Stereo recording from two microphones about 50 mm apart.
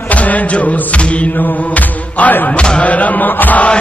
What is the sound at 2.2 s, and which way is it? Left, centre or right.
Speech, left.